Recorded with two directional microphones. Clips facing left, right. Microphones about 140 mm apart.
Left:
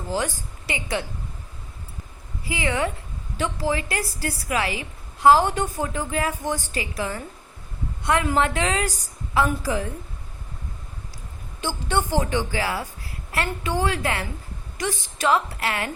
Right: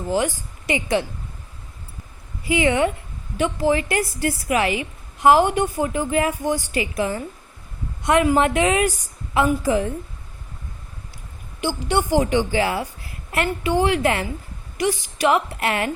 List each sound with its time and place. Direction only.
0.1 s a woman's voice: 15° right (ahead or behind)
2.5 s a woman's voice: 20° right (ahead or behind)
11.6 s a woman's voice: 15° right (ahead or behind)